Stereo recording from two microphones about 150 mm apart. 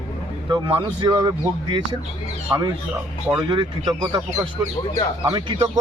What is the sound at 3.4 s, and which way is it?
Speech, 30° right (ahead or behind).